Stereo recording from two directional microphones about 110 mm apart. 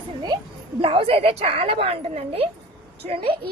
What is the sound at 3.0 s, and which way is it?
Speech, 90° right.